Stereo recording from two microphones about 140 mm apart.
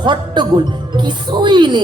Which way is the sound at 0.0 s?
35° right (ahead or behind).